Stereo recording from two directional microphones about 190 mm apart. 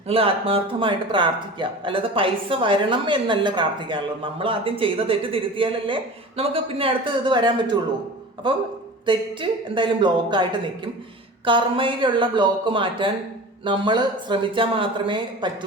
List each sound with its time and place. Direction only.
0.1 s speech: 30° right (ahead or behind)
9.0 s speech: 25° right (ahead or behind)
11.4 s speech: 25° right (ahead or behind)